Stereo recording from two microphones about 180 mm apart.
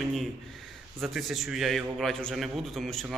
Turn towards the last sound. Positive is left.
turn(degrees=0)  # may be behind; listen again after turning